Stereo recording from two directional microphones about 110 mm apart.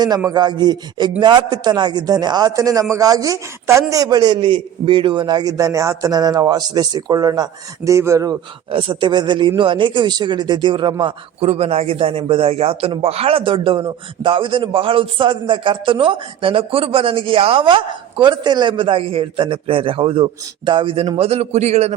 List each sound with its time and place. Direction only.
0.3 s a man's voice: 40° right (ahead or behind)
7.9 s speech: 25° right (ahead or behind)
8.7 s a man's voice: 45° right (ahead or behind)
11.0 s a man's voice: 60° right (ahead or behind)
21.2 s a man's voice: 70° right (ahead or behind); by 21.9 s 85° right